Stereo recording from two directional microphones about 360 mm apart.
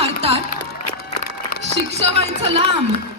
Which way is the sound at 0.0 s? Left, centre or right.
Centre.